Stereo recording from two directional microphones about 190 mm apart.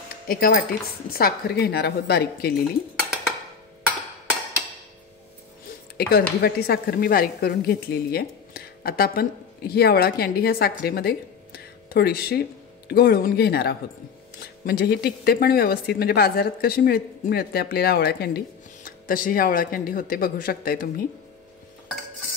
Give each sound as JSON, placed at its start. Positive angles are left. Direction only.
{"t": 0.3, "sound": "a woman's voice", "side_deg": 50}
{"t": 5.9, "sound": "speech", "side_deg": 55}